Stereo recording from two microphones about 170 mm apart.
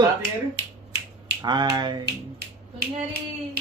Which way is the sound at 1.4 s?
25° right (ahead or behind).